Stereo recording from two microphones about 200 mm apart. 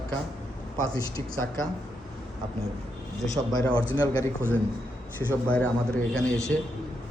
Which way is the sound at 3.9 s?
20° left (ahead or behind).